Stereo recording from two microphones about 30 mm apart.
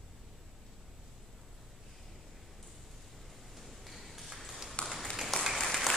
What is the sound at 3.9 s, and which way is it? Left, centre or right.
Ping, centre.